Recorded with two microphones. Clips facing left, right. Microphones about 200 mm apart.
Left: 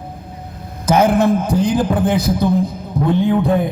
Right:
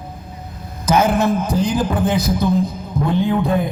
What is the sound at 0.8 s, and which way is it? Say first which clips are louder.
A man's voice: left 3 dB; 60° left (ahead or behind).